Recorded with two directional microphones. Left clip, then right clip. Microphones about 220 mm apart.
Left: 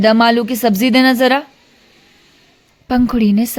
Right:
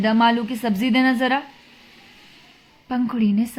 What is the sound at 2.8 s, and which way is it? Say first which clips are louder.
Speech: left 8 dB; 50° left (ahead or behind).